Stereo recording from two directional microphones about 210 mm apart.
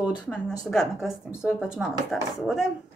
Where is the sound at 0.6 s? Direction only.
Centre (ahead or behind).